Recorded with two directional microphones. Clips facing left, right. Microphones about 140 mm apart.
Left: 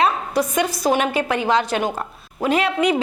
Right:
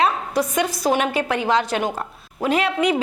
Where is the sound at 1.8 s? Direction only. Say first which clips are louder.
Left 1 dB; 30° left (ahead or behind).